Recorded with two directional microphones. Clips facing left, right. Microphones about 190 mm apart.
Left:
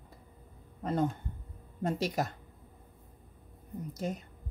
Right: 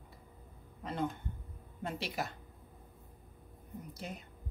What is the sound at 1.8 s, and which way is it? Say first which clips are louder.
Speech: left 7 dB; 45° left (ahead or behind).